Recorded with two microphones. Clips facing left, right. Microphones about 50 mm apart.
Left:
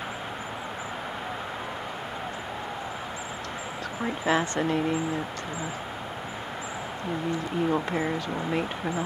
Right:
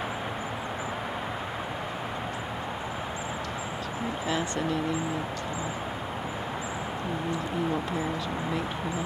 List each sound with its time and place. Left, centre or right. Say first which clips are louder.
4.3 s speech: left 6 dB; left